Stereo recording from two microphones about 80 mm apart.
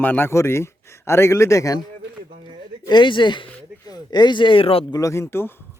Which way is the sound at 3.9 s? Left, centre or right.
Left.